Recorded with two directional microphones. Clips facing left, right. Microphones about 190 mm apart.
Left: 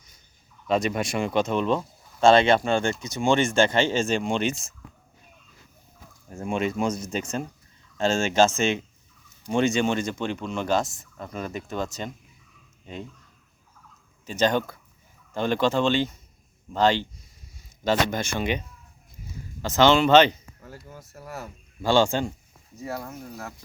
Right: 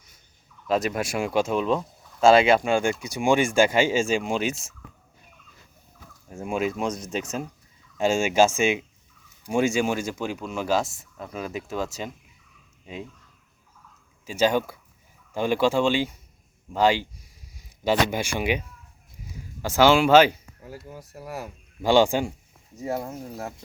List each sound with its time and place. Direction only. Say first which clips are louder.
0.7 s speech: even; 5° right (ahead or behind)
6.2 s speech: even; 5° right (ahead or behind)
14.3 s speech: right 1 dB; 10° right (ahead or behind)
22.8 s speech: right 4 dB; 25° right (ahead or behind)